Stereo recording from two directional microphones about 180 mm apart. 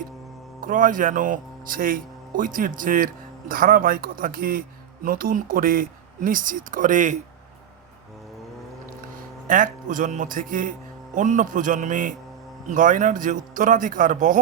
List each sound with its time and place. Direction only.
0.6 s speech: 50° right (ahead or behind)
9.5 s speech: 50° right (ahead or behind)